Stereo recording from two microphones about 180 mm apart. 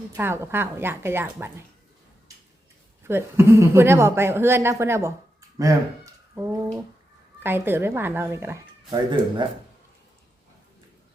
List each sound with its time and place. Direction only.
0.1 s a woman's voice: 15° right (ahead or behind)
3.0 s a woman's voice: 15° right (ahead or behind)
6.3 s a woman's voice: 15° right (ahead or behind)
8.9 s speech: 25° right (ahead or behind)